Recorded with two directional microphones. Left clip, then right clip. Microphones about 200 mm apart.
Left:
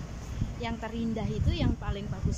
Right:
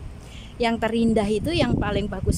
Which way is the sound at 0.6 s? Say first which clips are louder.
Right 14 dB; 55° right (ahead or behind).